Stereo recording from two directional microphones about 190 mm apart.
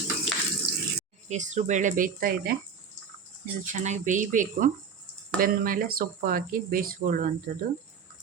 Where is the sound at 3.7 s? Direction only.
40° right (ahead or behind).